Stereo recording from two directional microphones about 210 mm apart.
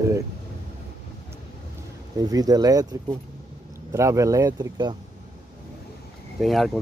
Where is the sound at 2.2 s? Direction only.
20° right (ahead or behind).